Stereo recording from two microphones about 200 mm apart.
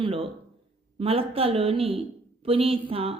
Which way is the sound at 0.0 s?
30° right (ahead or behind).